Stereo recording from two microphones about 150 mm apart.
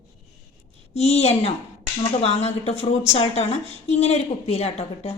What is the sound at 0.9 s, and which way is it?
A woman's voice, 45° left (ahead or behind).